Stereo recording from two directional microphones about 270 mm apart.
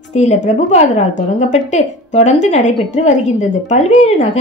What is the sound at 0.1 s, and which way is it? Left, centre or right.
A woman's voice, left.